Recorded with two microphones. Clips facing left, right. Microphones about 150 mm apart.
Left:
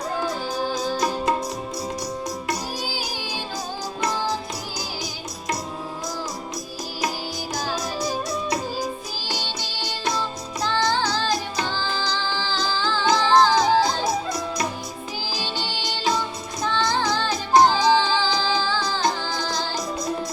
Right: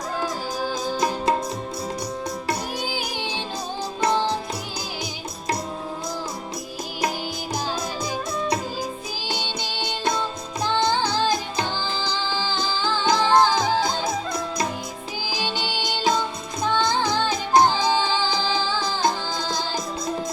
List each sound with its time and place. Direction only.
0.8 s music: 25° right (ahead or behind)
2.5 s music: 20° right (ahead or behind)
10.7 s music: 15° right (ahead or behind)
16.6 s music: 20° right (ahead or behind)